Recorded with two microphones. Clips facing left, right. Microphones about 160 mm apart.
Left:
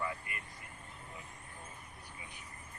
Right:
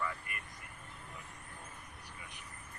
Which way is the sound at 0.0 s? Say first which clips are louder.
Even; 20° left (ahead or behind).